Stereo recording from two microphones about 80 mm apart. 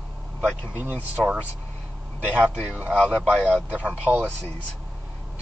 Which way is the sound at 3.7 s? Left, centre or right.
Centre.